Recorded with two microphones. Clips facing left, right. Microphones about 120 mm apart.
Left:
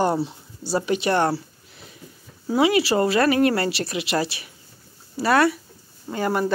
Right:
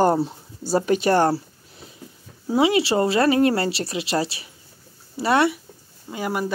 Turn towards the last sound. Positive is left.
turn(degrees=-10)  # may be behind; listen again after turning